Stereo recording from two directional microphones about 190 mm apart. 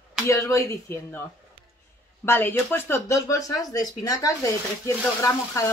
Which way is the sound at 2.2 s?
10° left (ahead or behind).